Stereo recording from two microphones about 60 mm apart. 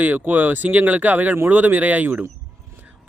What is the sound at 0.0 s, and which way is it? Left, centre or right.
Speech, right.